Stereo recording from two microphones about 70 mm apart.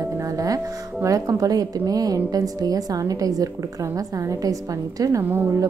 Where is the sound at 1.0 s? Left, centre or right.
Right.